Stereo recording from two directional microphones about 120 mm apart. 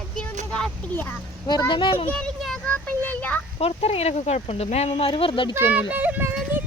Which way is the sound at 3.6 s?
55° left (ahead or behind).